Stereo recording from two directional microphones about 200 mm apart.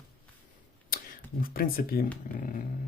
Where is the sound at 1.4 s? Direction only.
45° left (ahead or behind).